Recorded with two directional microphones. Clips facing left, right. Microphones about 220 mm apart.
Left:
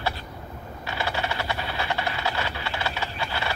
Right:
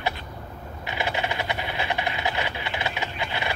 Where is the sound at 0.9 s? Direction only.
20° right (ahead or behind).